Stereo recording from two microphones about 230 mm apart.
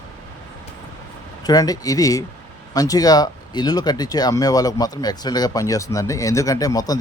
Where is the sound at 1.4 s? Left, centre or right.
Centre.